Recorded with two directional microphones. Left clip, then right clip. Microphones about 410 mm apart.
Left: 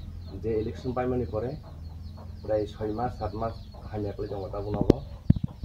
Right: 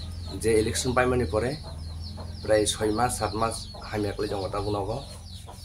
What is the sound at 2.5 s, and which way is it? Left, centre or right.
Speech, left.